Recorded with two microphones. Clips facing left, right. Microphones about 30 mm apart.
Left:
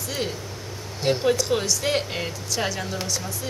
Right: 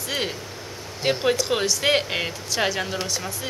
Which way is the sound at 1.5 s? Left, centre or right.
Right.